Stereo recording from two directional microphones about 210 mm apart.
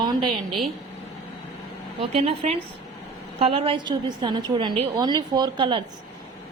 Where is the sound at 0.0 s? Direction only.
20° right (ahead or behind).